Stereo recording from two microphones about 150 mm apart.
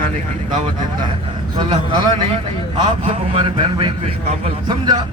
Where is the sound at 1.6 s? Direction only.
30° right (ahead or behind).